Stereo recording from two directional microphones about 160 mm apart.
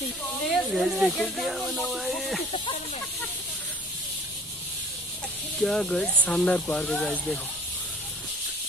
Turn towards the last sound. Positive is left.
turn(degrees=10)  # may be behind; listen again after turning